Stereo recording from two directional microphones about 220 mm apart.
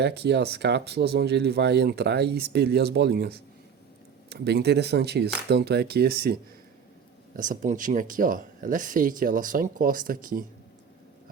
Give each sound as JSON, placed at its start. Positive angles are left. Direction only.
{"t": 0.0, "sound": "speech", "side_deg": -50}